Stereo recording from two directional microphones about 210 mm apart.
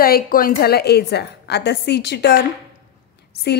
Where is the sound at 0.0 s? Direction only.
45° left (ahead or behind).